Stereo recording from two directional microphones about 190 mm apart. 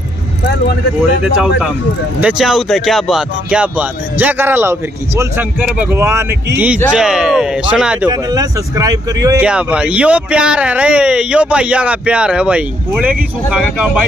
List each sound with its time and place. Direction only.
1.2 s speech: 5° right (ahead or behind)
8.1 s speech: 20° right (ahead or behind)
9.4 s speech: 5° right (ahead or behind)